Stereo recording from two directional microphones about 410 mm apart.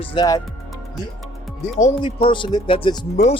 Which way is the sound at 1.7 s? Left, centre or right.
Centre.